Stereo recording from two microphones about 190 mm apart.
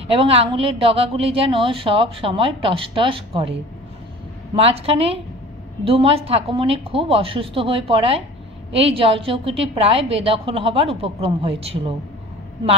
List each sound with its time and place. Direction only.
0.1 s a woman's voice: 30° right (ahead or behind)
4.6 s a woman's voice: 30° right (ahead or behind)